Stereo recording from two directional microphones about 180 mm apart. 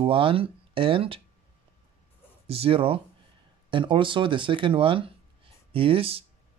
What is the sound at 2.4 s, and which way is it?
Speech, 30° right (ahead or behind).